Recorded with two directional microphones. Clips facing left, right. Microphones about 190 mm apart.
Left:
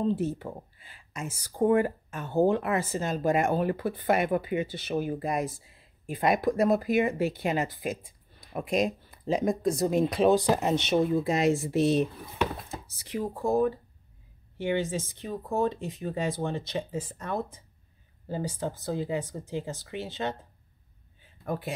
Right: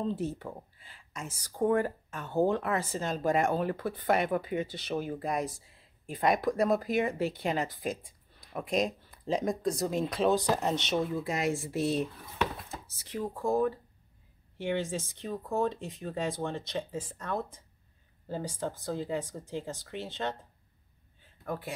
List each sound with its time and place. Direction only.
0.1 s speech: 5° left (ahead or behind)
11.1 s speech: 25° left (ahead or behind); by 20.3 s 5° left (ahead or behind)
21.5 s speech: 15° left (ahead or behind)